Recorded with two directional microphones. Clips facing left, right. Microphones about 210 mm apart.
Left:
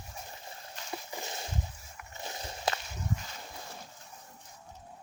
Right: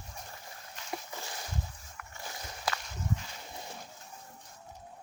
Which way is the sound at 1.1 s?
20° left (ahead or behind).